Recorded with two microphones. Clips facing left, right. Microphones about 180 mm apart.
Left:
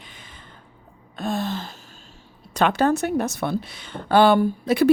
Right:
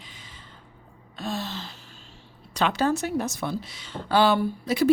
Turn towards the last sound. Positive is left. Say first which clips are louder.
# left 5 dB
turn(degrees=55)  # may be behind; listen again after turning